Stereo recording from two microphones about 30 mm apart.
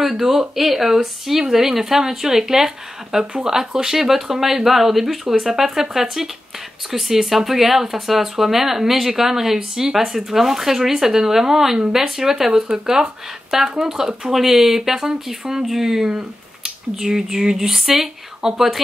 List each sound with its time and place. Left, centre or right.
0.0 s speech: centre